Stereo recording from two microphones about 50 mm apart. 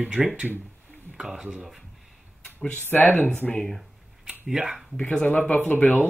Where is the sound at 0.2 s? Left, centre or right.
Centre.